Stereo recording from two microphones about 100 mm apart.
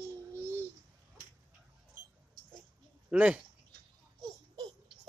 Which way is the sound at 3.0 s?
15° right (ahead or behind).